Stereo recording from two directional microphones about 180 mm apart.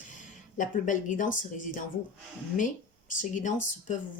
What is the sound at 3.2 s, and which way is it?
Speech, 45° left (ahead or behind).